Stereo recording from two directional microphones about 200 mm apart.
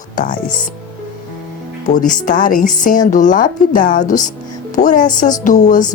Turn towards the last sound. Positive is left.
turn(degrees=35)  # may be behind; listen again after turning